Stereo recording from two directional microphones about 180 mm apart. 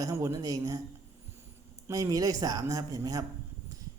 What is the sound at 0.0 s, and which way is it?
Speech, 15° right (ahead or behind).